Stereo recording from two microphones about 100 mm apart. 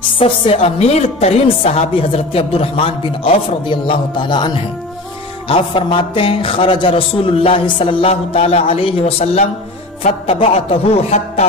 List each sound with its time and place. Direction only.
0.2 s a woman's voice: 75° left (ahead or behind)
10.2 s speech: 65° left (ahead or behind); by 11.4 s 90° left